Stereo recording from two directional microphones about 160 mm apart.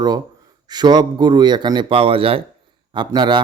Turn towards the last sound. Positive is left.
turn(degrees=-25)  # may be behind; listen again after turning